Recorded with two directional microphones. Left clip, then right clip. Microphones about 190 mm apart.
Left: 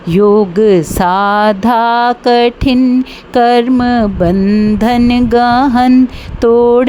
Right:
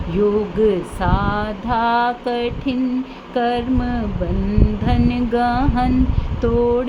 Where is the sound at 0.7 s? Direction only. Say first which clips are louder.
Left 9 dB; 70° left (ahead or behind).